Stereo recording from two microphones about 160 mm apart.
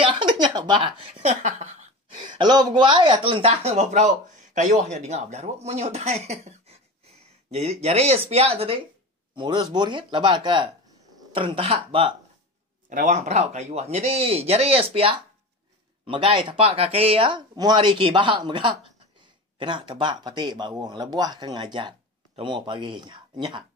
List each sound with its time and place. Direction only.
0.0 s a sound: 30° right (ahead or behind)
2.2 s speech: 30° right (ahead or behind)
12.9 s speech: 50° right (ahead or behind); by 23.6 s 30° right (ahead or behind)